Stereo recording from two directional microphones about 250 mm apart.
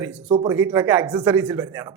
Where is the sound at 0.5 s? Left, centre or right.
Centre.